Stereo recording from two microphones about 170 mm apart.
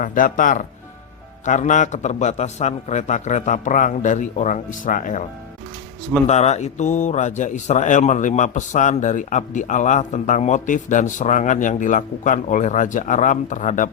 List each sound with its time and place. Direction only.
0.0 s a man's voice: 50° left (ahead or behind)
6.2 s a man's voice: 40° left (ahead or behind)